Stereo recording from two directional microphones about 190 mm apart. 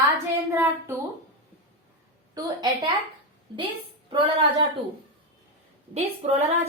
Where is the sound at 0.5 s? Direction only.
15° right (ahead or behind).